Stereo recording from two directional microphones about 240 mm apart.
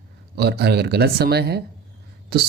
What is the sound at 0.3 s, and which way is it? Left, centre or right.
Speech, right.